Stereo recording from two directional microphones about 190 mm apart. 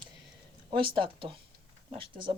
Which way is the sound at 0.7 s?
25° right (ahead or behind).